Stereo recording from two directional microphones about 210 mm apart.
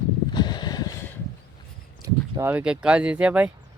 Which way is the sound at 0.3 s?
20° left (ahead or behind).